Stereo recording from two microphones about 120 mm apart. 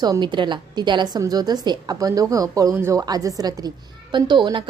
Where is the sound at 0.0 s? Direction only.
35° right (ahead or behind).